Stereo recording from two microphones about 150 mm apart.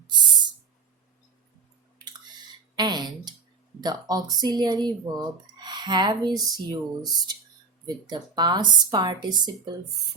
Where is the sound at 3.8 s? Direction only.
25° right (ahead or behind).